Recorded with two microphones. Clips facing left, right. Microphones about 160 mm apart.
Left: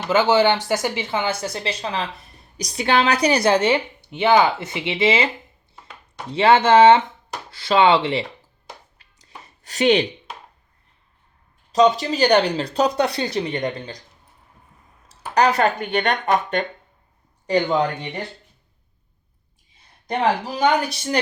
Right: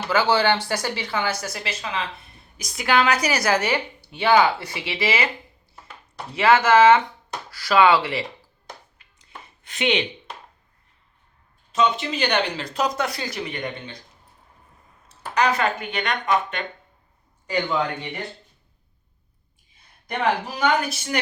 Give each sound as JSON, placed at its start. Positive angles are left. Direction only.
{"t": 0.1, "sound": "a woman's voice", "side_deg": 20}
{"t": 6.3, "sound": "a woman's voice", "side_deg": 30}
{"t": 9.6, "sound": "speech", "side_deg": 40}
{"t": 11.7, "sound": "speech", "side_deg": 40}
{"t": 15.4, "sound": "speech", "side_deg": 35}
{"t": 20.6, "sound": "speech", "side_deg": 35}